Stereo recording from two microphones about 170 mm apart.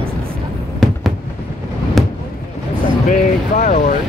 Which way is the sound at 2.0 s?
Centre (ahead or behind).